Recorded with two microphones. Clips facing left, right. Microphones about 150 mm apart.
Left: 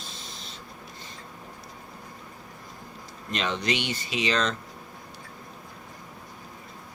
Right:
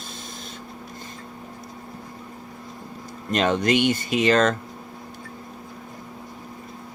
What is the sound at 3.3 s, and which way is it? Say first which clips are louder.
Speech: right 8 dB; 50° right (ahead or behind).